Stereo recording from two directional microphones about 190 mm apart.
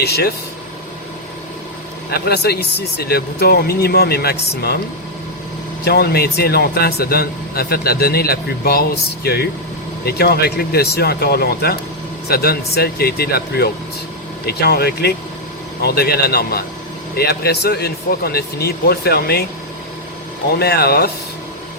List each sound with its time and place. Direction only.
0.0 s speech: 55° left (ahead or behind)
2.0 s speech: 55° left (ahead or behind)
5.8 s speech: 55° left (ahead or behind)
20.5 s speech: 55° left (ahead or behind)